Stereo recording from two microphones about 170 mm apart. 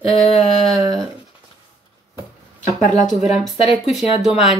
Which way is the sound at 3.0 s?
Centre (ahead or behind).